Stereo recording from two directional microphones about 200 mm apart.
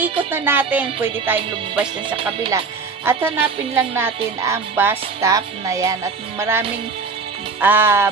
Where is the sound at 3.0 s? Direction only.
10° right (ahead or behind).